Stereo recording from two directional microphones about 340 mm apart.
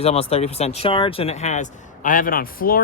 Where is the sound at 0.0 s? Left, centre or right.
Centre.